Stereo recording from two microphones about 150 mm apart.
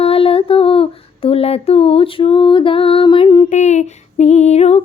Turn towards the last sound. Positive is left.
turn(degrees=45)  # may be behind; listen again after turning